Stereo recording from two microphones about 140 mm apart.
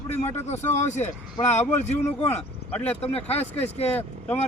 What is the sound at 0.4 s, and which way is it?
Speech, 55° left (ahead or behind).